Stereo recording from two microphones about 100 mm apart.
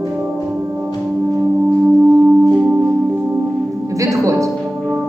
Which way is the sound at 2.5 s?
15° right (ahead or behind).